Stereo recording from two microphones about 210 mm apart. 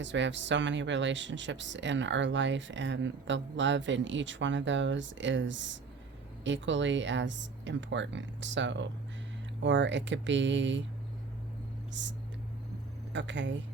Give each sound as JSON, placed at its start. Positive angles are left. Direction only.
{"t": 0.0, "sound": "speech", "side_deg": -60}
{"t": 12.0, "sound": "speech", "side_deg": -60}
{"t": 13.1, "sound": "speech", "side_deg": -60}